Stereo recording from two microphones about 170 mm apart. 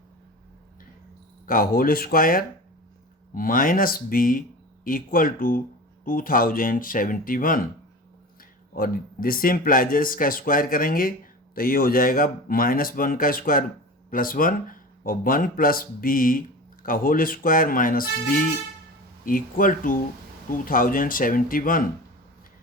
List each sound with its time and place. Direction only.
1.5 s speech: 55° left (ahead or behind)
8.7 s speech: 60° left (ahead or behind)